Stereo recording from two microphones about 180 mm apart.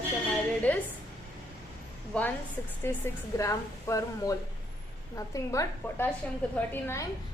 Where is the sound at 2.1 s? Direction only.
5° left (ahead or behind).